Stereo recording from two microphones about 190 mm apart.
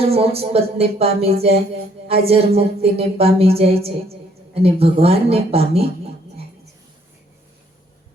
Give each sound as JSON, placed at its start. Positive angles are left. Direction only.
{"t": 0.1, "sound": "a woman's voice", "side_deg": -30}